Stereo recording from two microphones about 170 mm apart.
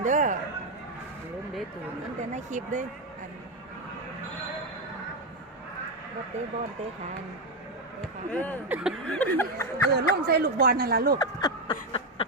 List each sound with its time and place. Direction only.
0.0 s speech: 45° right (ahead or behind)
2.3 s speech: 45° right (ahead or behind)
8.3 s speech: 10° left (ahead or behind)
8.7 s speech: 5° right (ahead or behind); by 9.8 s 15° left (ahead or behind)
9.9 s speech: 70° right (ahead or behind)
11.2 s speech: 25° left (ahead or behind)
11.9 s a sound: 35° left (ahead or behind)